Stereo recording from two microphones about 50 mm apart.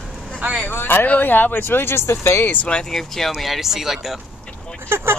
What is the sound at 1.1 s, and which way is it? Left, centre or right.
Speech, left.